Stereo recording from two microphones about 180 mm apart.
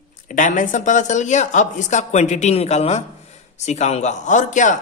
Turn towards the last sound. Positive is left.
turn(degrees=45)  # may be behind; listen again after turning